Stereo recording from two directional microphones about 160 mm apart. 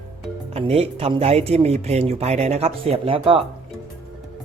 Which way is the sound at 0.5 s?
40° right (ahead or behind).